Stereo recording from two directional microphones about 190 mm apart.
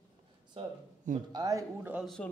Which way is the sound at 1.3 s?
20° right (ahead or behind).